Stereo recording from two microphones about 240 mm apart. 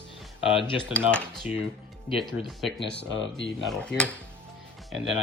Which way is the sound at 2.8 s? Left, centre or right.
Left.